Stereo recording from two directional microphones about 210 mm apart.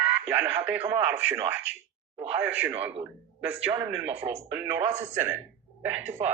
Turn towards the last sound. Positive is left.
turn(degrees=-10)  # may be behind; listen again after turning